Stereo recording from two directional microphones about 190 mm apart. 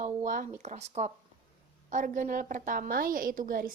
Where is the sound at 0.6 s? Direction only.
35° right (ahead or behind).